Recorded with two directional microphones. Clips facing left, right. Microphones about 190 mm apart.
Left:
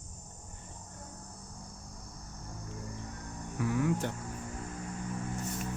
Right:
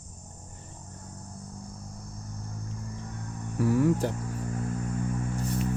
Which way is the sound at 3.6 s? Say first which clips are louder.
Right 7 dB; 40° right (ahead or behind).